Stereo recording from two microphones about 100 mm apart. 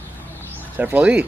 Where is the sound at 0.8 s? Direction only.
15° right (ahead or behind).